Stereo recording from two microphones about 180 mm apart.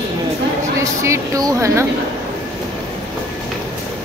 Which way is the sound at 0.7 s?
15° right (ahead or behind).